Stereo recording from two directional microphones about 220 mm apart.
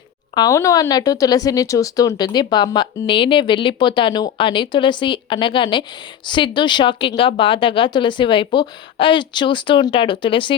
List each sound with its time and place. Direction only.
0.3 s speech: 15° left (ahead or behind)